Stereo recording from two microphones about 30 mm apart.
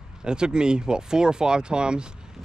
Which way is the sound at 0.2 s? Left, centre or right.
Right.